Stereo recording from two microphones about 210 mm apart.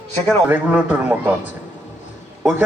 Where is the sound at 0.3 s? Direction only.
5° right (ahead or behind).